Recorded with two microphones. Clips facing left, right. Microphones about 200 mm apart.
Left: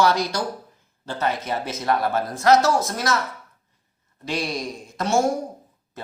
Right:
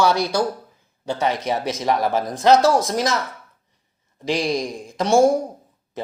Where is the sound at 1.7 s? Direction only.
15° right (ahead or behind).